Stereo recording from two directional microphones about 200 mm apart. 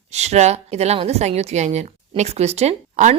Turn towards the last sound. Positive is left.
turn(degrees=-35)  # may be behind; listen again after turning